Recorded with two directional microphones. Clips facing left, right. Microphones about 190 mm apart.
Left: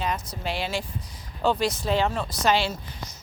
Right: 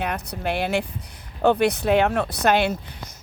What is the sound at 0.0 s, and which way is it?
Speech, 60° right (ahead or behind).